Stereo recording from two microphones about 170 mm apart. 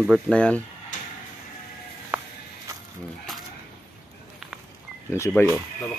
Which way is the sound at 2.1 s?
10° right (ahead or behind).